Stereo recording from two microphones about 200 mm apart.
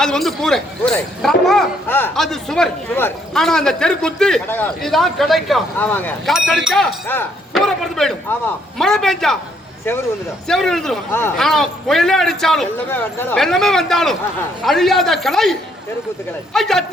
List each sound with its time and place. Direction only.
0.0 s speech: centre (ahead or behind)
10.5 s speech: centre (ahead or behind)